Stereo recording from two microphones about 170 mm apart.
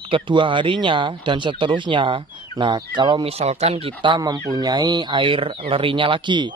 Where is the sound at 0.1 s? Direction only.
30° right (ahead or behind).